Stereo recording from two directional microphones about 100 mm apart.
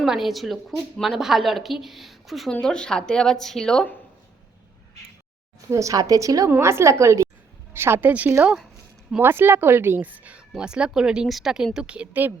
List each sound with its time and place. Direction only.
0.0 s a woman's voice: 5° right (ahead or behind)
5.7 s a woman's voice: 35° right (ahead or behind); by 12.3 s 15° right (ahead or behind)